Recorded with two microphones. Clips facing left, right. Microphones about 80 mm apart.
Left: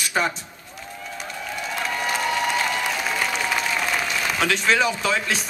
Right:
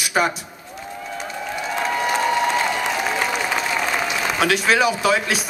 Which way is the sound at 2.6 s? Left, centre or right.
Centre.